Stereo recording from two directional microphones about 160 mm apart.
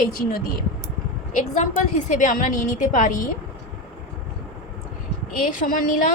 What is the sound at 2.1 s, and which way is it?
A woman's voice, 50° left (ahead or behind).